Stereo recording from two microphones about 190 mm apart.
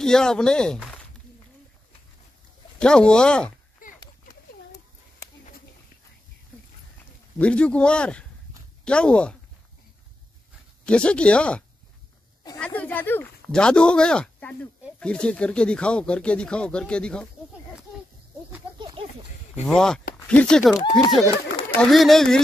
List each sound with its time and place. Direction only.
0.0 s speech: 5° left (ahead or behind)
2.8 s speech: 5° left (ahead or behind)
3.8 s a sound: 45° left (ahead or behind)
7.3 s speech: 5° left (ahead or behind)
10.9 s speech: 5° left (ahead or behind)
19.0 s a sound: 30° right (ahead or behind)
19.6 s speech: 5° left (ahead or behind)